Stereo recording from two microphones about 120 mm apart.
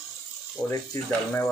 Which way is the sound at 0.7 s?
25° left (ahead or behind).